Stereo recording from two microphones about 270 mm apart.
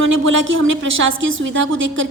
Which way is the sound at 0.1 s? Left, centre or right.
Right.